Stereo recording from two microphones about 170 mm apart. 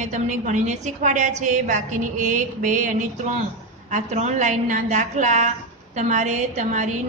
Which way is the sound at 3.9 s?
45° right (ahead or behind).